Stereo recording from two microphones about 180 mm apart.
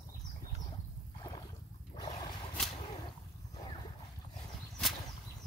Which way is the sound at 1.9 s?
25° left (ahead or behind).